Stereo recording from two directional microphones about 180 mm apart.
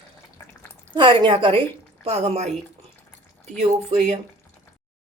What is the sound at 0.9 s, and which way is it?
Speech, 25° right (ahead or behind).